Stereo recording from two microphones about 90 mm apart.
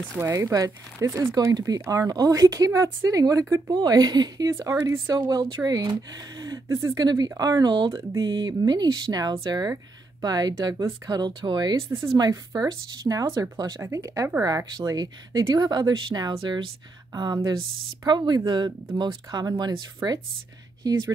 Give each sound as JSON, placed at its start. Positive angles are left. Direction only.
{"t": 0.2, "sound": "speech", "side_deg": -35}
{"t": 3.7, "sound": "speech", "side_deg": -50}
{"t": 4.6, "sound": "speech", "side_deg": -35}
{"t": 5.2, "sound": "speech", "side_deg": -50}
{"t": 7.9, "sound": "speech", "side_deg": -35}
{"t": 8.2, "sound": "speech", "side_deg": -50}
{"t": 20.8, "sound": "speech", "side_deg": -45}